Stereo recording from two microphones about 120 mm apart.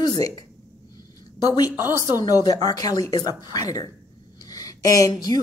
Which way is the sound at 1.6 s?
30° left (ahead or behind).